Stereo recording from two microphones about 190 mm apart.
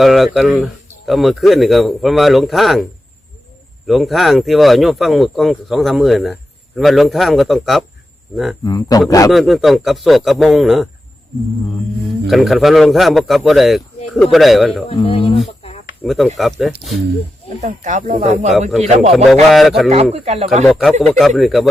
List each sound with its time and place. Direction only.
0.0 s speech: centre (ahead or behind)
3.8 s speech: centre (ahead or behind)
8.6 s speech: 20° left (ahead or behind)
9.3 s speech: centre (ahead or behind)
12.3 s speech: centre (ahead or behind)
14.8 s speech: 30° left (ahead or behind)
16.0 s speech: centre (ahead or behind)
17.6 s speech: 40° right (ahead or behind)
19.1 s speech: centre (ahead or behind)
19.9 s speech: 35° right (ahead or behind)
20.7 s speech: centre (ahead or behind)